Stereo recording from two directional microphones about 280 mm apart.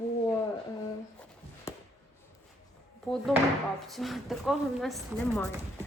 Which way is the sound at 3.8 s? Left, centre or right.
Centre.